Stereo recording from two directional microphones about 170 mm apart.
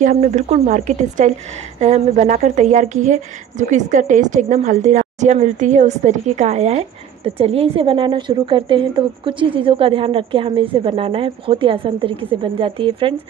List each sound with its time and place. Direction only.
0.0 s a woman's voice: 45° right (ahead or behind); by 13.1 s 30° right (ahead or behind)